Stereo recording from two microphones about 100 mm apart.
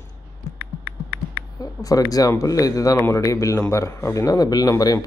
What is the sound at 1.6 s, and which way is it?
A man's voice, 35° left (ahead or behind).